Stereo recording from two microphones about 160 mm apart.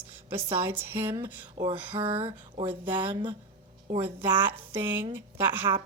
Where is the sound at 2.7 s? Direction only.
10° right (ahead or behind).